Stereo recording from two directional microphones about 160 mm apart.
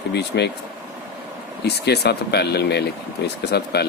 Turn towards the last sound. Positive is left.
turn(degrees=90)